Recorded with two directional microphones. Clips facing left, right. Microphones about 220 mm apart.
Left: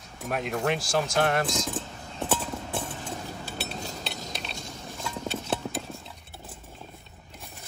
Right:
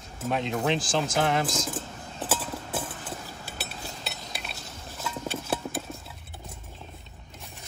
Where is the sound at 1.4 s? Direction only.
Centre (ahead or behind).